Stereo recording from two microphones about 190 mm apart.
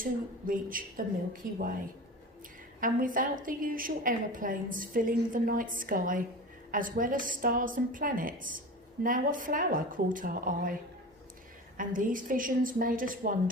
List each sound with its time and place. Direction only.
0.0 s a woman's voice: 45° right (ahead or behind)
2.8 s a woman's voice: 45° right (ahead or behind)
11.8 s a woman's voice: 45° right (ahead or behind)